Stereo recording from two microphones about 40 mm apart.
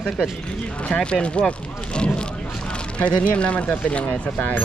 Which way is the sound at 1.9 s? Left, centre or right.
Left.